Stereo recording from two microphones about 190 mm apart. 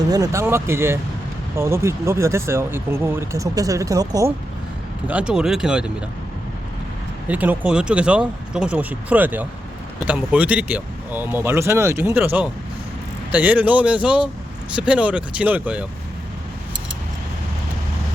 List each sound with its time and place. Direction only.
0.1 s speech: 15° right (ahead or behind)
5.0 s speech: 5° right (ahead or behind)
7.3 s speech: 10° right (ahead or behind)